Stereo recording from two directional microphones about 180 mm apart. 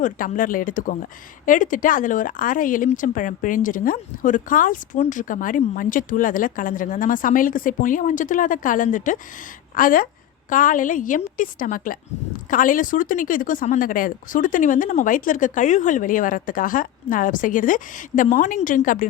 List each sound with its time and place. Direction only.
0.0 s speech: 50° left (ahead or behind)